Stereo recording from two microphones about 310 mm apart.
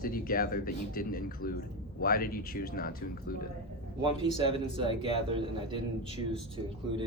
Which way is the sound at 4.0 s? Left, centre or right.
Centre.